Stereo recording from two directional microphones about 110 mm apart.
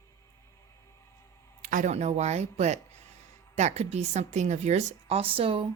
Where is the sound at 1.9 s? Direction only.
85° right; by 5.7 s 55° right (ahead or behind).